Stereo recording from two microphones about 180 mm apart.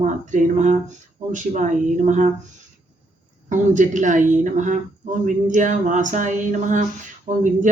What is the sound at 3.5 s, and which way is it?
Speech, 45° right (ahead or behind).